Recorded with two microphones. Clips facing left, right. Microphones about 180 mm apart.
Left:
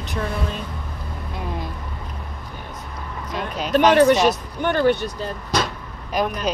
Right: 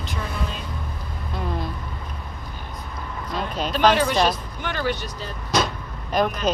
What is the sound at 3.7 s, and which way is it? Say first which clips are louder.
Speech: left 5 dB; 60° left (ahead or behind).